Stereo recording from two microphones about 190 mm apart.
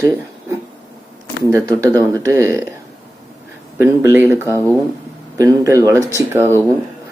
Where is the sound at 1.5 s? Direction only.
15° right (ahead or behind).